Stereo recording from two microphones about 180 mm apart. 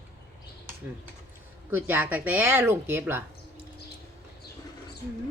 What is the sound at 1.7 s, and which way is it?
Speech, 10° right (ahead or behind).